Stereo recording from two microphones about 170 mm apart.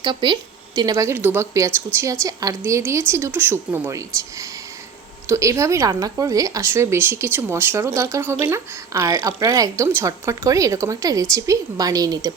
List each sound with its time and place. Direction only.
0.0 s a woman's voice: 25° right (ahead or behind)